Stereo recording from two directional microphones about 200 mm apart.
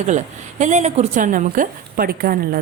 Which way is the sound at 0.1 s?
35° right (ahead or behind).